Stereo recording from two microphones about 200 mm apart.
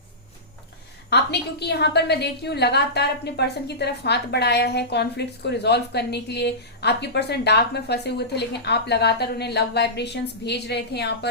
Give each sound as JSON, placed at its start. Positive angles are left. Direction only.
{"t": 1.1, "sound": "a woman's voice", "side_deg": 55}